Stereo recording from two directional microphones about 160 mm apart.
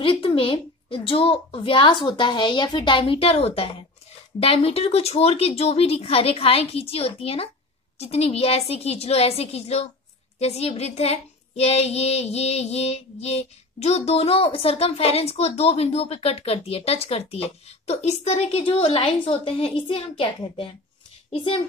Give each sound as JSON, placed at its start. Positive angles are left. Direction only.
{"t": 0.0, "sound": "a woman's voice", "side_deg": 35}